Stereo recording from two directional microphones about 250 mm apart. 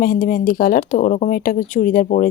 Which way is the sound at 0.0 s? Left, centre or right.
Left.